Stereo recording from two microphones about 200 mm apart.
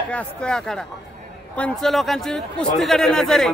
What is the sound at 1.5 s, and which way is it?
Speech, centre (ahead or behind).